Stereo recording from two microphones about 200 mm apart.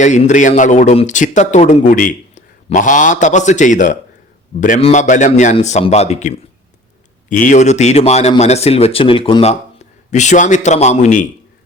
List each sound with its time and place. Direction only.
0.0 s speech: 35° left (ahead or behind)